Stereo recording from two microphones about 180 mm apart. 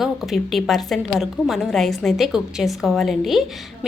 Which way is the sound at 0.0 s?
Centre (ahead or behind).